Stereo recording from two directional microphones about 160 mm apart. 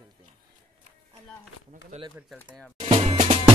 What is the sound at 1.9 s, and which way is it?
Speech, 45° right (ahead or behind).